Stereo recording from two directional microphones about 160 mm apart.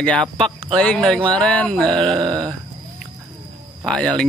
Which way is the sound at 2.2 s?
25° right (ahead or behind).